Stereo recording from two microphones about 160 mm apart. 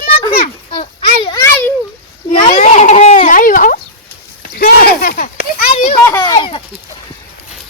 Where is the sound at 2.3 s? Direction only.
40° left (ahead or behind).